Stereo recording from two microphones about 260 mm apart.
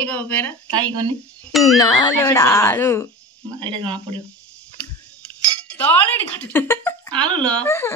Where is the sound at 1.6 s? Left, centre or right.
Centre.